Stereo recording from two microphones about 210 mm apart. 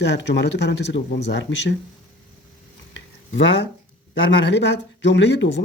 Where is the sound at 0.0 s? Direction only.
60° left (ahead or behind).